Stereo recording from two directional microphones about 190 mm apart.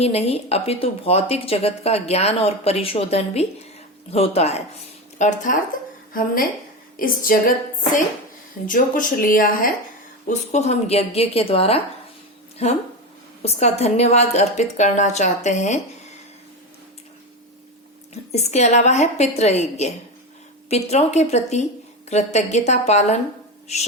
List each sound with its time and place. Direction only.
0.0 s speech: 35° left (ahead or behind)
6.9 s speech: 45° left (ahead or behind)
8.6 s speech: 45° left (ahead or behind)
10.2 s speech: 35° left (ahead or behind)
13.4 s speech: 35° left (ahead or behind)
18.1 s speech: 35° left (ahead or behind)